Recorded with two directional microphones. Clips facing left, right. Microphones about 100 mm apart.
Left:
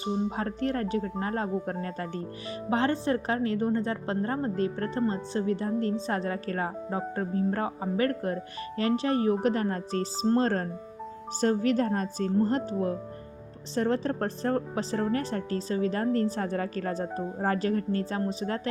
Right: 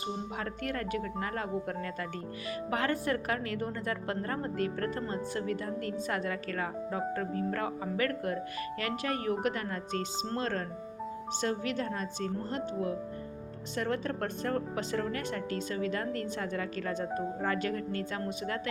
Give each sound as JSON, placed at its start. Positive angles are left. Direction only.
{"t": 0.0, "sound": "a woman's voice", "side_deg": 35}